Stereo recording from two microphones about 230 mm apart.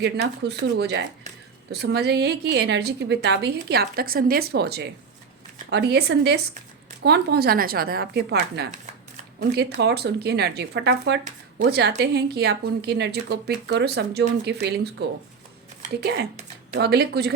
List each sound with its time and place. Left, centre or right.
0.0 s a woman's voice: right